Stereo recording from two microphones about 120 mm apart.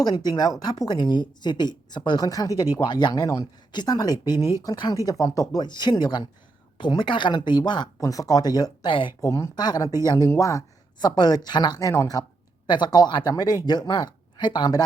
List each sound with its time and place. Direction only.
0.0 s a woman's voice: 35° left (ahead or behind)
9.2 s speech: 25° left (ahead or behind)
9.9 s speech: 25° right (ahead or behind)
10.2 s speech: 25° left (ahead or behind)
11.0 s a woman's voice: 35° left (ahead or behind)
12.6 s a woman's voice: 40° left (ahead or behind)